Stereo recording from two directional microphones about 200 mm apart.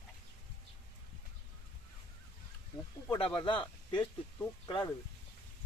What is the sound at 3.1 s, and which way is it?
Speech, 25° left (ahead or behind).